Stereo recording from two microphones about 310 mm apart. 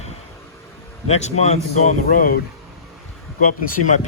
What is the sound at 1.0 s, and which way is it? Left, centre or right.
Speech, left.